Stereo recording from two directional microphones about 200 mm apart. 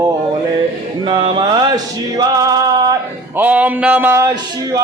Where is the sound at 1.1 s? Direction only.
25° right (ahead or behind).